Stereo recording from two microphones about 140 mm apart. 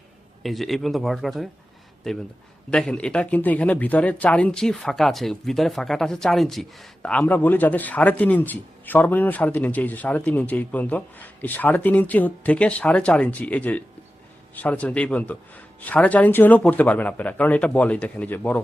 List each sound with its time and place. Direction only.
0.4 s a man's voice: centre (ahead or behind)
2.6 s speech: 5° left (ahead or behind)